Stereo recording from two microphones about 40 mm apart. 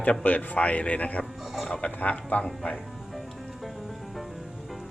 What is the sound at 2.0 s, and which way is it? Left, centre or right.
Speech, left.